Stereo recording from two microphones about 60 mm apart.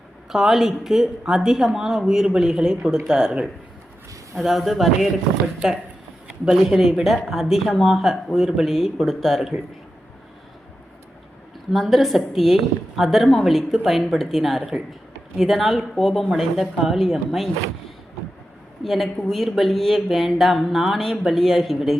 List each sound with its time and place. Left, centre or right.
0.3 s speech: centre
4.4 s speech: centre
5.5 s speech: centre
11.7 s speech: centre